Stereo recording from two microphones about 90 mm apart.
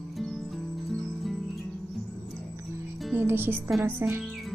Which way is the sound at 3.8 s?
20° right (ahead or behind).